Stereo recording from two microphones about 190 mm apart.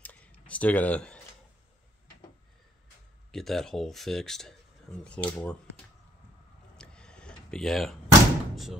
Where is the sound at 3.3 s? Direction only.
Centre (ahead or behind).